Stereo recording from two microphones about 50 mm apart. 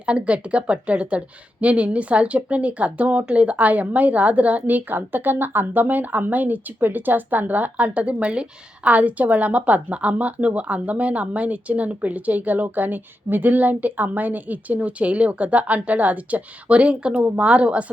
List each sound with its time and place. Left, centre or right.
0.0 s speech: right